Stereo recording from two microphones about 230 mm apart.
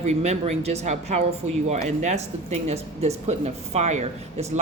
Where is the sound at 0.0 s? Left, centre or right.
Right.